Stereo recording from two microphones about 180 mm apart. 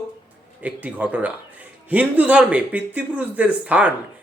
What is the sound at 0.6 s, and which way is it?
Speech, 10° right (ahead or behind).